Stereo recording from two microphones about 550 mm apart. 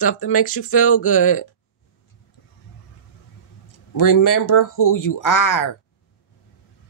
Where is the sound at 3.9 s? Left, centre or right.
Left.